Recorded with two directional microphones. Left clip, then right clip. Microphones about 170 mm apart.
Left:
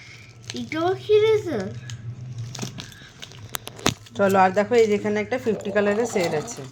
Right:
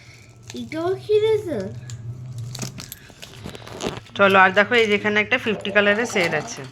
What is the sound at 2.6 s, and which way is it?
Keys jangling, 25° right (ahead or behind).